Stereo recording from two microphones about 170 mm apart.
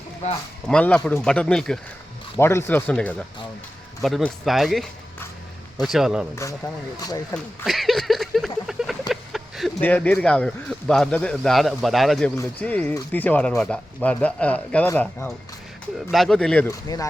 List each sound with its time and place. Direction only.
0.7 s a man's voice: 5° left (ahead or behind)
2.4 s a man's voice: 15° left (ahead or behind); by 6.2 s 5° right (ahead or behind)
6.9 s speech: 20° left (ahead or behind)
7.3 s a sound: centre (ahead or behind)
9.8 s a man's voice: 10° left (ahead or behind)
16.6 s speech: 20° left (ahead or behind)